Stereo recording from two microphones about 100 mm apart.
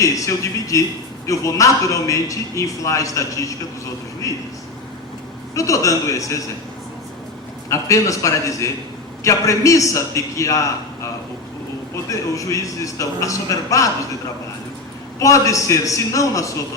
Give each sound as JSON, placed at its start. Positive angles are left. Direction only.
{"t": 0.0, "sound": "a man's voice", "side_deg": 35}
{"t": 5.5, "sound": "a man's voice", "side_deg": 30}
{"t": 7.7, "sound": "a man's voice", "side_deg": 30}
{"t": 12.1, "sound": "a man's voice", "side_deg": 35}
{"t": 15.2, "sound": "a man's voice", "side_deg": 35}